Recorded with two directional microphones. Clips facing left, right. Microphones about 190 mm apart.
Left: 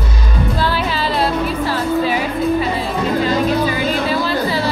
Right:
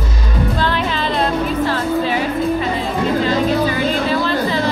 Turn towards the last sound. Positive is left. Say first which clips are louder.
# even
turn(degrees=5)  # may be behind; listen again after turning